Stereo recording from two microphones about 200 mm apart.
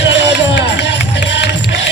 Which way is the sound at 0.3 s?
60° left (ahead or behind).